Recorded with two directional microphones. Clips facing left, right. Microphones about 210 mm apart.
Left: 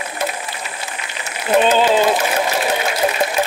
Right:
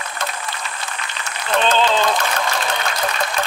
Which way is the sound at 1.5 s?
10° left (ahead or behind).